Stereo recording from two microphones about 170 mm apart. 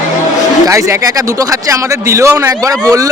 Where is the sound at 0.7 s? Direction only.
15° right (ahead or behind).